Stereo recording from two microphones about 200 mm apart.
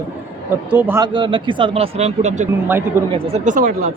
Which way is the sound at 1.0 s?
25° right (ahead or behind).